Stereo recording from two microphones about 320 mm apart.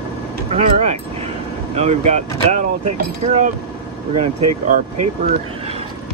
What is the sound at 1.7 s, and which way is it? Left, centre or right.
Speech, centre.